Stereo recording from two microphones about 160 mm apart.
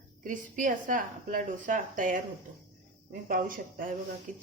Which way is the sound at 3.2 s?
60° right (ahead or behind).